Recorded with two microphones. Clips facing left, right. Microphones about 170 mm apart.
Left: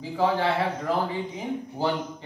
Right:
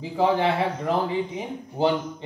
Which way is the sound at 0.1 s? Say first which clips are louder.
Right 2 dB; 20° right (ahead or behind).